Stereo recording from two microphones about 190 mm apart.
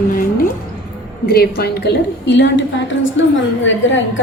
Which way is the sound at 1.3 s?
55° left (ahead or behind).